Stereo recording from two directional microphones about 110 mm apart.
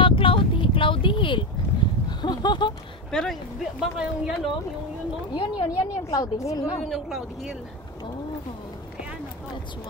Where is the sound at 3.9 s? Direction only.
5° right (ahead or behind).